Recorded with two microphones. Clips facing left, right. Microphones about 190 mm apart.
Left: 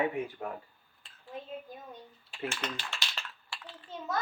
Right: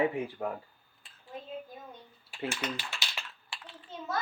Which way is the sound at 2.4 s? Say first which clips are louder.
Right 2 dB; 10° right (ahead or behind).